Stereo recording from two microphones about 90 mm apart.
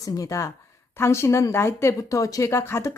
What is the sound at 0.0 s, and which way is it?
Speech, 40° left (ahead or behind).